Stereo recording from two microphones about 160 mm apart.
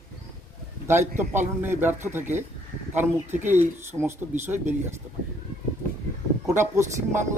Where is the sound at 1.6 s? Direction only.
15° right (ahead or behind).